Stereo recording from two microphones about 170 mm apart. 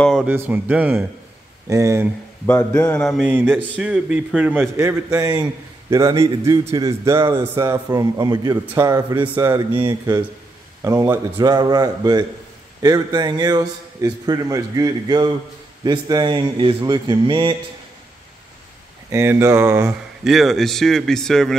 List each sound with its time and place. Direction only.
0.0 s speech: centre (ahead or behind)
0.3 s a man's voice: 10° right (ahead or behind)
2.4 s a man's voice: 15° left (ahead or behind)
3.0 s speech: centre (ahead or behind)
3.3 s a man's voice: 10° right (ahead or behind)
4.7 s a man's voice: 20° right (ahead or behind)
19.0 s a man's voice: 15° right (ahead or behind)
20.2 s speech: centre (ahead or behind)